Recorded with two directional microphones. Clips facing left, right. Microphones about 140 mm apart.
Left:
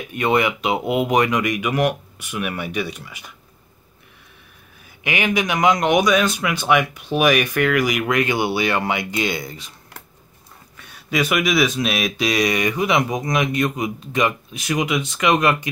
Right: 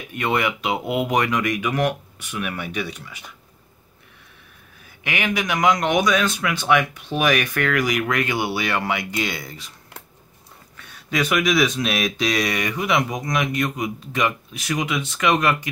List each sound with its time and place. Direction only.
0.1 s speech: 20° left (ahead or behind)
5.0 s speech: 20° left (ahead or behind)
11.1 s speech: 10° left (ahead or behind)